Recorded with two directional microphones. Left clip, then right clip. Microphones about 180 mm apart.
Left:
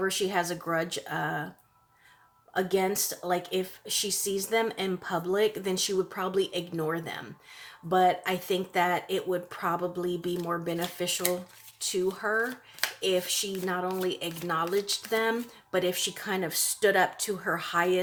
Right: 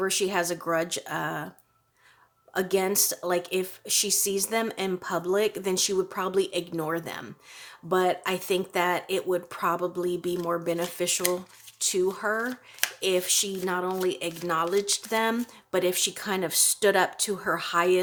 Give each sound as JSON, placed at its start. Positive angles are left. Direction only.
{"t": 0.0, "sound": "speech", "side_deg": -40}
{"t": 2.5, "sound": "speech", "side_deg": -40}